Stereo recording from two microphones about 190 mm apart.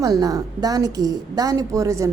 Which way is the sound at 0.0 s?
20° right (ahead or behind).